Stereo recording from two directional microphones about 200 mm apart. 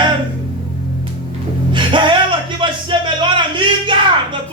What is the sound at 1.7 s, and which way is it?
Music, 25° right (ahead or behind).